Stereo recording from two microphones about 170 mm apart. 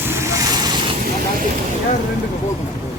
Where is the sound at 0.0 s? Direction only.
15° right (ahead or behind).